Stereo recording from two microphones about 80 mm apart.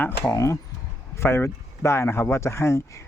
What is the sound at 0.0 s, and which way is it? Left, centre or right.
Speech, left.